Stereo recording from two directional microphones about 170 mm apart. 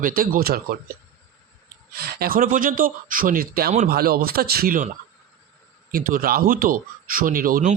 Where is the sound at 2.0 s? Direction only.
65° right (ahead or behind).